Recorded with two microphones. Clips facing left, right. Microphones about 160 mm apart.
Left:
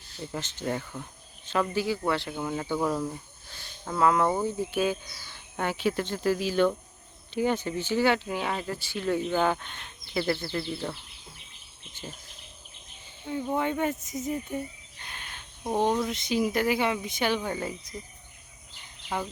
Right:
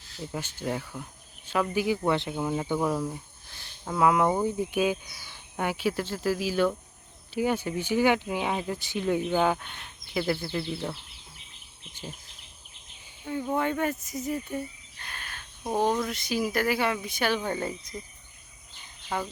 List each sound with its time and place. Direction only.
0.3 s speech: 5° right (ahead or behind)
1.7 s speech: 15° right (ahead or behind)
13.2 s speech: 10° left (ahead or behind)
17.4 s speech: 10° left (ahead or behind)
19.0 s speech: 10° left (ahead or behind)